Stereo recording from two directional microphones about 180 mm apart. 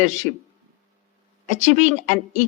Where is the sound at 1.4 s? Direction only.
40° right (ahead or behind).